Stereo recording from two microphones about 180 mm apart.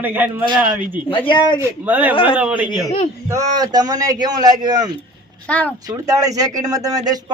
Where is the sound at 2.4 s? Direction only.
5° right (ahead or behind).